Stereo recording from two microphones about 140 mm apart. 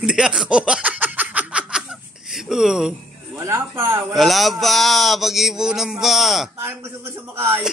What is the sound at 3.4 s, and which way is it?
Speech, 20° right (ahead or behind).